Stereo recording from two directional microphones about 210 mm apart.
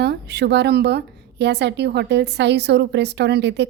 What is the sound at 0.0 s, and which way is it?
A woman's voice, 55° right (ahead or behind).